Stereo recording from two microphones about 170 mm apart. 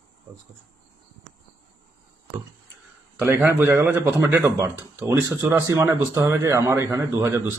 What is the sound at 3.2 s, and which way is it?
Speech, 15° right (ahead or behind).